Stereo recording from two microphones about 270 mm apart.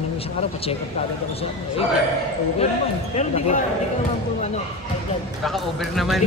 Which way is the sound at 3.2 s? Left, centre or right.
Left.